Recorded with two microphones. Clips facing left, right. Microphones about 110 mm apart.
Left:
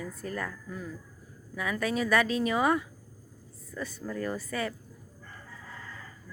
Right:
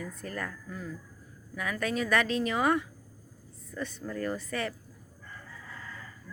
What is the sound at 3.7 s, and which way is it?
Speech, 5° left (ahead or behind).